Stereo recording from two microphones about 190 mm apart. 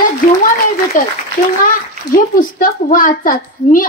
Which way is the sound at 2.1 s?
45° left (ahead or behind).